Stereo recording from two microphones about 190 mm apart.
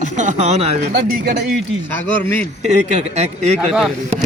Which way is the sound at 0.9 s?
55° right (ahead or behind).